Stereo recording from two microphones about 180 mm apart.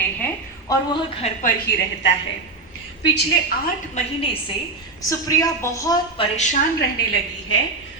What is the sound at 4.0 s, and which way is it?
Speech, 40° left (ahead or behind).